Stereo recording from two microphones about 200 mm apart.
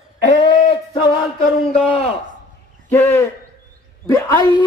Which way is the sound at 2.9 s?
10° left (ahead or behind).